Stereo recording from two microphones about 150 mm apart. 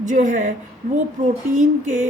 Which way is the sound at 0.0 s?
55° right (ahead or behind).